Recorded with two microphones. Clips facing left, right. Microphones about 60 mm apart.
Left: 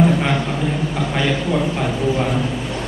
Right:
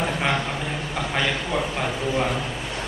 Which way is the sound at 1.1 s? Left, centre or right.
Centre.